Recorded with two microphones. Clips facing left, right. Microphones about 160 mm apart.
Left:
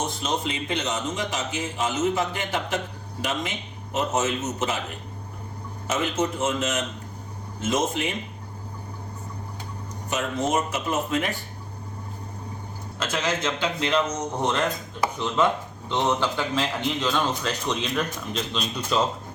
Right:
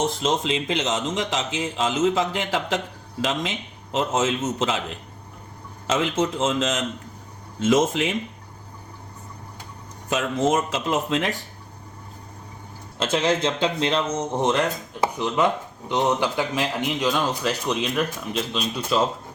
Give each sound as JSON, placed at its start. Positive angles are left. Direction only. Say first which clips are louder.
{"t": 0.2, "sound": "a man's voice", "louder": "right 4 dB", "side_deg": -90}
{"t": 5.9, "sound": "a man's voice", "louder": "right 3 dB", "side_deg": -90}
{"t": 10.1, "sound": "a man's voice", "louder": "right 4 dB", "side_deg": -90}
{"t": 13.0, "sound": "speech", "louder": "right 5 dB", "side_deg": -30}